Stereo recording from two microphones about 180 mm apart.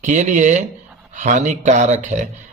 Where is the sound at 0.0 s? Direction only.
45° right (ahead or behind).